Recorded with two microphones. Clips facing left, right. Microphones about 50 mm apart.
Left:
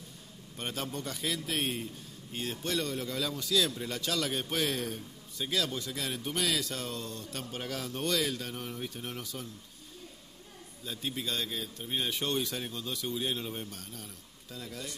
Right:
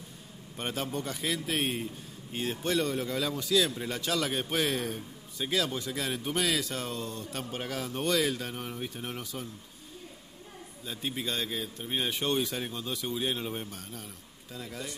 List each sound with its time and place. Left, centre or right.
0.6 s a man's voice: centre
10.9 s a man's voice: centre